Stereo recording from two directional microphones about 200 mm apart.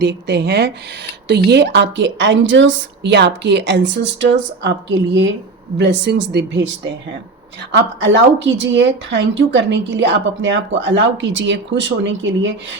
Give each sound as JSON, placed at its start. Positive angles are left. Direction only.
{"t": 0.0, "sound": "a woman's voice", "side_deg": -55}
{"t": 7.7, "sound": "a woman's voice", "side_deg": -65}